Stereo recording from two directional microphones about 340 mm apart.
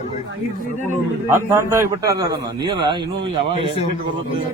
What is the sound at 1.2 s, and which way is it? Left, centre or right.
A man's voice, centre.